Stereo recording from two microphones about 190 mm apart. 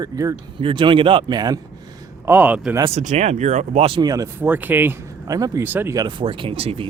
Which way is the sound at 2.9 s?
35° right (ahead or behind).